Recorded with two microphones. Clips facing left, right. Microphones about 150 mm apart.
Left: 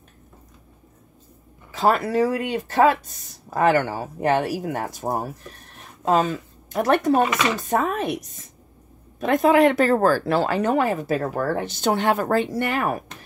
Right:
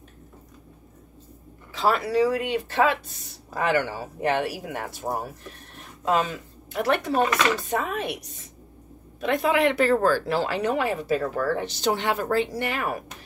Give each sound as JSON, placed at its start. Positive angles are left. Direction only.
{"t": 1.7, "sound": "speech", "side_deg": 45}
{"t": 9.2, "sound": "speech", "side_deg": 45}